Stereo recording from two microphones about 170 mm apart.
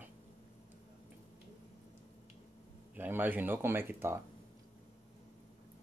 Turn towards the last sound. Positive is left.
turn(degrees=-15)  # may be behind; listen again after turning